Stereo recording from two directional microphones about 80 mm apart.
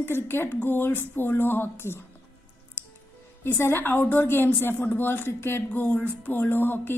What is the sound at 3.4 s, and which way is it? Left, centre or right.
A woman's voice, left.